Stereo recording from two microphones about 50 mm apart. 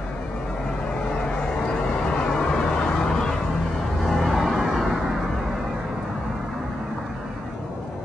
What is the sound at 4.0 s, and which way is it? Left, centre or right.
Vehicle, centre.